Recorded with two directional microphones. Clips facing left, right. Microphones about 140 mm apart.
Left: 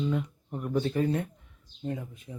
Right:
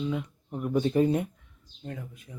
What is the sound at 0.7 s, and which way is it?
Speech, 20° right (ahead or behind).